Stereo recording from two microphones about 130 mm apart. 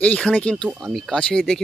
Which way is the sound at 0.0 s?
10° left (ahead or behind).